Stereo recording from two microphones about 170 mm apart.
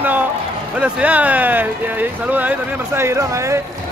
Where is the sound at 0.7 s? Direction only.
10° right (ahead or behind).